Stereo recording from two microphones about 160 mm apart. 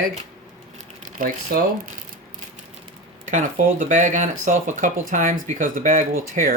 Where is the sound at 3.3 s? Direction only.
55° right (ahead or behind).